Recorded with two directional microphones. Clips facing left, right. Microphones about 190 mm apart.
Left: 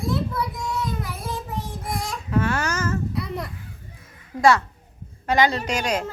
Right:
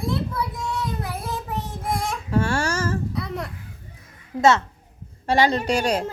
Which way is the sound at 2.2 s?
30° right (ahead or behind).